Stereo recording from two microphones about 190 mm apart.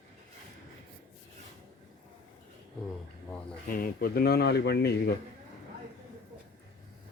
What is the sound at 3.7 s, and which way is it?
Speech, 50° left (ahead or behind).